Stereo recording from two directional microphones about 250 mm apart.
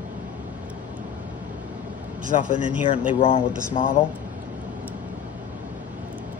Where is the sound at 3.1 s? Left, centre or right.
Left.